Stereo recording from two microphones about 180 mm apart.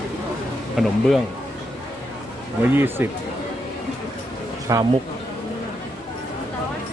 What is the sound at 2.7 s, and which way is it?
Speech, 10° right (ahead or behind).